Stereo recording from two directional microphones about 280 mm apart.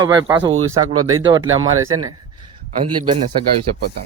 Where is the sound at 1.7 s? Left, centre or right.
Right.